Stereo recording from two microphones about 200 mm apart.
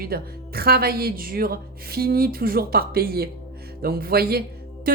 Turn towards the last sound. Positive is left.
turn(degrees=-50)  # may be behind; listen again after turning